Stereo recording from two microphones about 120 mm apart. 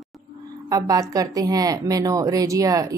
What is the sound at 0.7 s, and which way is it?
A woman's voice, 30° right (ahead or behind).